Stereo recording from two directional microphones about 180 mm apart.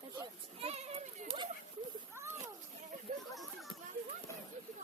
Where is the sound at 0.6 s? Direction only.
35° right (ahead or behind).